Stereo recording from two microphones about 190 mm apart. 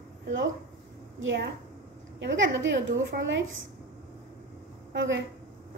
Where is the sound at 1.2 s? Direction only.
75° right (ahead or behind).